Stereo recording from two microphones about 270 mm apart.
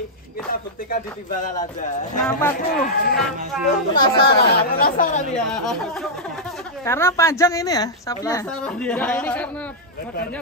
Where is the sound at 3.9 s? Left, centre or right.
Left.